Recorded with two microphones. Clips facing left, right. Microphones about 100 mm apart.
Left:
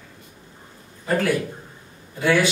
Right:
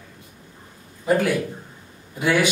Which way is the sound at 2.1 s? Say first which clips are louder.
Left 1 dB; 15° right (ahead or behind).